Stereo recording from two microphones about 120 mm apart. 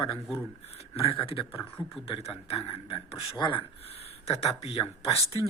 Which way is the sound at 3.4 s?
45° left (ahead or behind).